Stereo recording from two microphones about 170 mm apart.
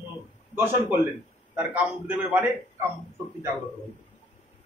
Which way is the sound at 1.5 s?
10° right (ahead or behind).